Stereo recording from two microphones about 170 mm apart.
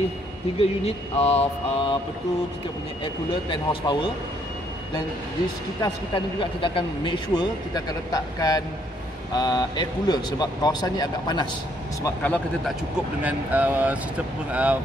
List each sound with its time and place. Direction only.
0.6 s a sound: 35° left (ahead or behind)
3.0 s speech: 30° left (ahead or behind)
5.8 s speech: 30° left (ahead or behind)
12.0 s speech: 10° left (ahead or behind)
13.2 s speech: 10° right (ahead or behind)